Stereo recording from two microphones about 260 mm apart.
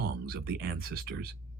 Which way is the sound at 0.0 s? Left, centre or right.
Right.